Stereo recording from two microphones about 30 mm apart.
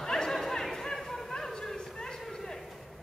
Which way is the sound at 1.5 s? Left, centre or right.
Left.